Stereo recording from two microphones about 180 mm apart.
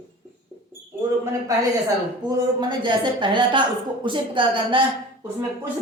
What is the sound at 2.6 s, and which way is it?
Speech, 25° right (ahead or behind).